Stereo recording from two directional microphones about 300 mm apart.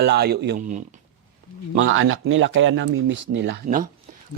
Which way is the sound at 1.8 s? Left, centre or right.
Right.